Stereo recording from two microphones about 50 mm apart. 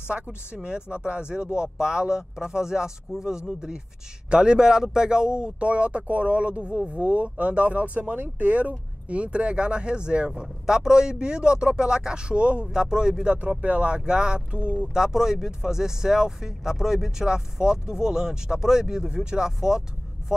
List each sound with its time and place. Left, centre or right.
0.1 s speech: right
13.6 s speech: right
15.0 s speech: centre